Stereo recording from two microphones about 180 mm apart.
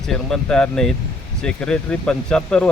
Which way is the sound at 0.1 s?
5° left (ahead or behind).